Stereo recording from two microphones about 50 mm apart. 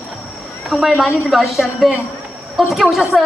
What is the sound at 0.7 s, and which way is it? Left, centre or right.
A woman's voice, centre.